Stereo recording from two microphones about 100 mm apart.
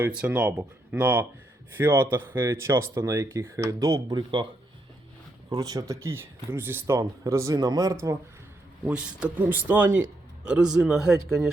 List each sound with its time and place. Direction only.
0.0 s speech: 15° right (ahead or behind); by 4.4 s 45° right (ahead or behind)
5.5 s speech: 40° right (ahead or behind)
8.8 s speech: 10° right (ahead or behind)